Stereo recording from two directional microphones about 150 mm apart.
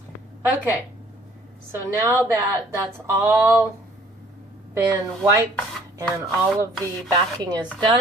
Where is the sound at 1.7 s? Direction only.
15° right (ahead or behind).